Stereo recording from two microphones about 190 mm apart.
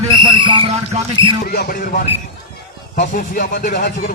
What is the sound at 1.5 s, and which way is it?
A man's voice, 50° left (ahead or behind).